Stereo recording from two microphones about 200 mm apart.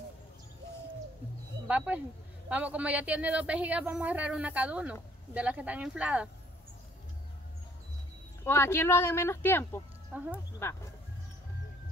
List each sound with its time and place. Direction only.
1.7 s a sound: 5° right (ahead or behind)
2.5 s speech: 5° right (ahead or behind)
8.5 s speech: 10° left (ahead or behind)
10.1 s speech: 10° right (ahead or behind)
10.6 s speech: 10° left (ahead or behind)